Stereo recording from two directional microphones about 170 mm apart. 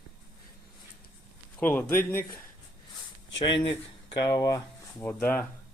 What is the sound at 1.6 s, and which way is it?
Speech, 10° left (ahead or behind).